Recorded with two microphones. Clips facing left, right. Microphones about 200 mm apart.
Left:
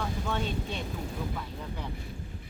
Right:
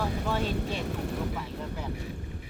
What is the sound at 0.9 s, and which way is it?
Speech, 70° right (ahead or behind).